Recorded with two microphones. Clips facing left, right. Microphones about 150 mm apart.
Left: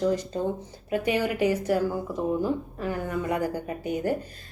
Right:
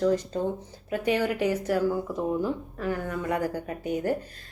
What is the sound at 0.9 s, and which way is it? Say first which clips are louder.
Speech: even; 10° left (ahead or behind).